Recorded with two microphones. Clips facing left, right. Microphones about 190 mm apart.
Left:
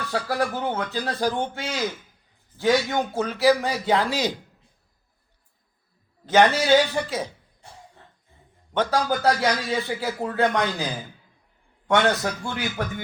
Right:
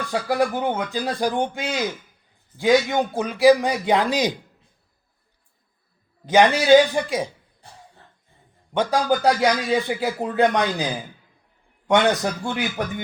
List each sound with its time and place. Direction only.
0.1 s speech: 15° right (ahead or behind)
6.2 s speech: 15° right (ahead or behind)
8.7 s speech: 15° right (ahead or behind)
11.9 s speech: 15° right (ahead or behind)